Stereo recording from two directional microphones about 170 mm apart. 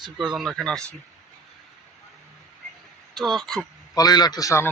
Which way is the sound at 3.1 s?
Centre (ahead or behind).